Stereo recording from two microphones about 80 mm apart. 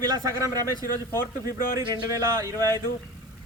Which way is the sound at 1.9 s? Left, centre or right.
Right.